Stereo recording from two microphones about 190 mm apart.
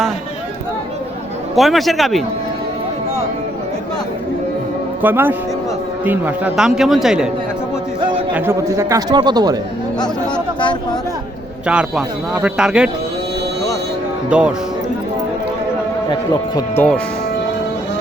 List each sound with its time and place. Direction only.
1.5 s a man's voice: centre (ahead or behind)
5.0 s a man's voice: 10° right (ahead or behind)
8.3 s speech: 10° right (ahead or behind)
11.6 s a man's voice: 5° right (ahead or behind)
14.3 s speech: 5° right (ahead or behind)
16.6 s speech: 10° left (ahead or behind)